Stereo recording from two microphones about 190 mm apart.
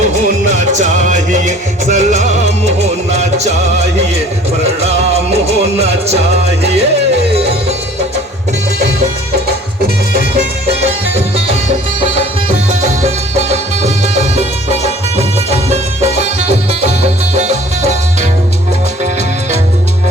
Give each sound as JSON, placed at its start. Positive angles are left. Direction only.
{"t": 0.1, "sound": "music", "side_deg": -40}
{"t": 4.6, "sound": "music", "side_deg": -35}
{"t": 12.8, "sound": "music", "side_deg": -35}